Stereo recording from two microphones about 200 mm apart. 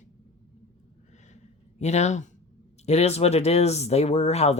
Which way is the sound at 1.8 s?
35° left (ahead or behind).